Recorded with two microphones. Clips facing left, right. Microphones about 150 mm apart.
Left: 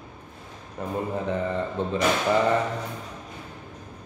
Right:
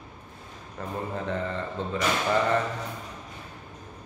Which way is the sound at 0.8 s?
15° left (ahead or behind).